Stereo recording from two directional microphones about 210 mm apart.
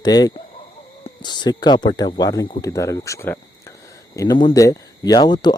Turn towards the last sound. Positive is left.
turn(degrees=20)  # may be behind; listen again after turning